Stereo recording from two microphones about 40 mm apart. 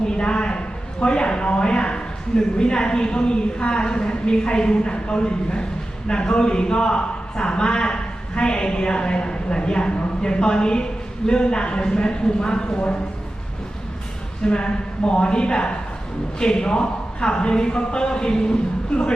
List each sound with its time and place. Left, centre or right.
0.0 s a sound: left
2.6 s a man's voice: left
14.4 s a man's voice: left